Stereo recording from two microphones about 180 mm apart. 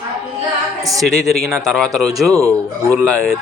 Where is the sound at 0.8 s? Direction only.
20° right (ahead or behind).